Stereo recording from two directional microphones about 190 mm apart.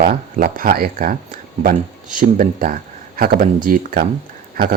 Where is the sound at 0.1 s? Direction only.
45° right (ahead or behind).